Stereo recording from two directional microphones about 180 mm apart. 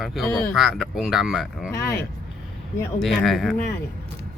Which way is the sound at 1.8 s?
60° left (ahead or behind).